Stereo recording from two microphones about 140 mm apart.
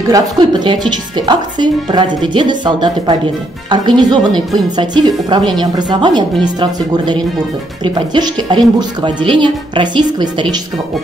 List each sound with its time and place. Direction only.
0.1 s speech: 30° right (ahead or behind)